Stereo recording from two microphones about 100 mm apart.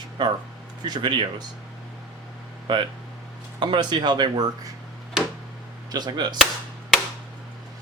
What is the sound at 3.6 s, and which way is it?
Speech, 50° right (ahead or behind).